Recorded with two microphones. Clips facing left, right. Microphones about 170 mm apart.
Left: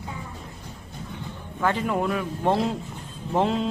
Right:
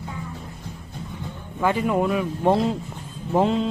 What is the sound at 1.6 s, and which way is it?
Speech, 5° right (ahead or behind).